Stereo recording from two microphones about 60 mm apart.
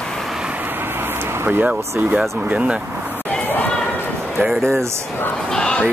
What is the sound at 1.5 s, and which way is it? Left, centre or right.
Speech, right.